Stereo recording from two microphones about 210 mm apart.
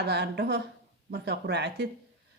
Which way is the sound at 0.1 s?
50° right (ahead or behind).